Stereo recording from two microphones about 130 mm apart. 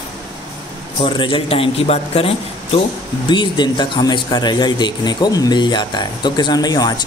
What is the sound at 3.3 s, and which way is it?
Speech, 35° left (ahead or behind).